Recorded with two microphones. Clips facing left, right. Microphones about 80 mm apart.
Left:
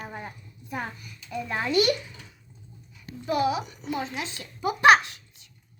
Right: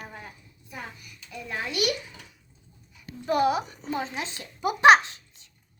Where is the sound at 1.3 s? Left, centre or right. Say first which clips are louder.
Left 4 dB; left.